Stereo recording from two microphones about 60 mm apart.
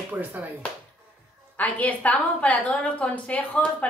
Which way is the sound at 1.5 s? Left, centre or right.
Left.